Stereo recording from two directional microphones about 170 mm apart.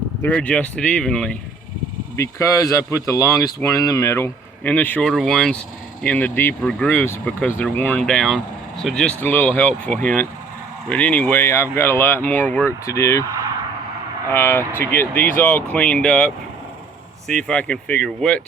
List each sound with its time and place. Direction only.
0.2 s speech: 10° left (ahead or behind)
2.1 s speech: 15° left (ahead or behind)
9.9 s speech: 55° right (ahead or behind)
10.8 s speech: 10° left (ahead or behind)
14.3 s speech: 15° left (ahead or behind)